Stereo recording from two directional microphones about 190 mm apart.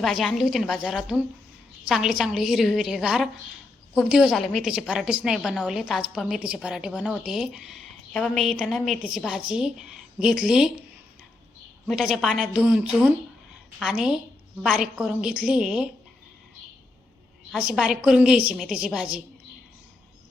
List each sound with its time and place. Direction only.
0.0 s a woman's voice: centre (ahead or behind)
11.9 s a woman's voice: centre (ahead or behind)
17.5 s a woman's voice: 5° right (ahead or behind)